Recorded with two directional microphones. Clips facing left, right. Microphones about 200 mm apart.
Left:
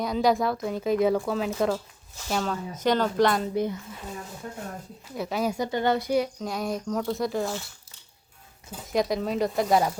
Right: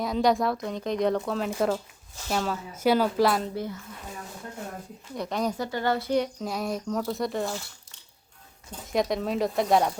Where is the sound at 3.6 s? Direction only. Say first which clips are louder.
Left 6 dB; 20° left (ahead or behind).